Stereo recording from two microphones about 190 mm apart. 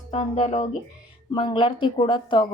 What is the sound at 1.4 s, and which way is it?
Speech, 25° left (ahead or behind).